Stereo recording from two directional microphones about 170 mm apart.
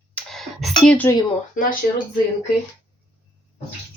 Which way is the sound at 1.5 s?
55° left (ahead or behind).